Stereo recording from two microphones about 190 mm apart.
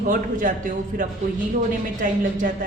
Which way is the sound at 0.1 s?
45° right (ahead or behind).